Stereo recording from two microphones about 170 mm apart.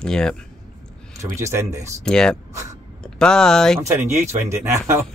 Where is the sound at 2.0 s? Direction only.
5° left (ahead or behind).